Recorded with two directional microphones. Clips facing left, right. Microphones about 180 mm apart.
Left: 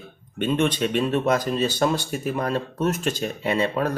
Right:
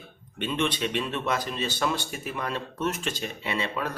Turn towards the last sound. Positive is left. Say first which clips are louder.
# left 7 dB
turn(degrees=40)  # may be behind; listen again after turning